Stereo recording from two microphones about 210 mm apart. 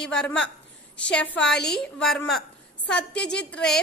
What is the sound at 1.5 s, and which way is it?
Speech, 50° left (ahead or behind).